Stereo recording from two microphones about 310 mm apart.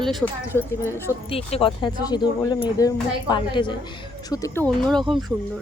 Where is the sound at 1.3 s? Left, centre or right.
Centre.